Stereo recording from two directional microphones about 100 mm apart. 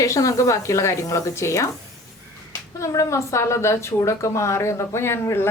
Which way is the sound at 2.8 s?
30° left (ahead or behind).